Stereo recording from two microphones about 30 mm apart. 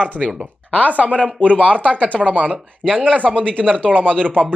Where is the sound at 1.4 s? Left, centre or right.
Left.